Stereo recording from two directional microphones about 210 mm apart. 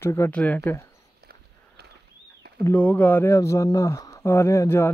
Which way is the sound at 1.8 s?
50° right (ahead or behind).